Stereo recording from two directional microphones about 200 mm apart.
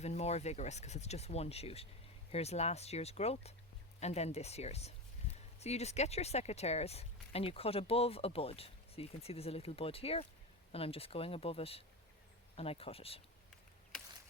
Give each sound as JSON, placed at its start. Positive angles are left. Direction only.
{"t": 0.0, "sound": "speech", "side_deg": 35}